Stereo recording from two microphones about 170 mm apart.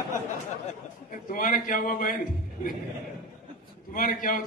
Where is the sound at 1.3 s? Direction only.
55° left (ahead or behind).